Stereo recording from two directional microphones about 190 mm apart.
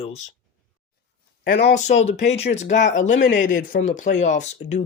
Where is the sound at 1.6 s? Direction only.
35° left (ahead or behind).